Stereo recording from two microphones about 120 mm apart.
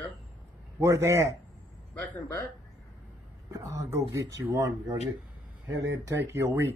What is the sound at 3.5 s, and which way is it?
A man's voice, 25° right (ahead or behind).